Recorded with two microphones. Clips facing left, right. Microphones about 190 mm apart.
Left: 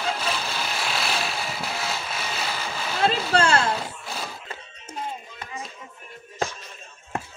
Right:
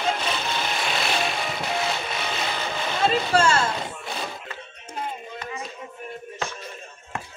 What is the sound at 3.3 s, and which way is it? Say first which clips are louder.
Speech: even; 65° left (ahead or behind).